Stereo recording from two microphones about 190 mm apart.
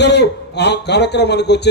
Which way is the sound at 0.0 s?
65° left (ahead or behind).